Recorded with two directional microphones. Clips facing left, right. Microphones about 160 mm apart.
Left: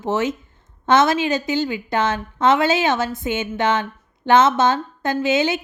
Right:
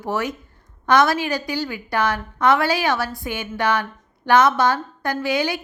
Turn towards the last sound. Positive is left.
turn(degrees=20)  # may be behind; listen again after turning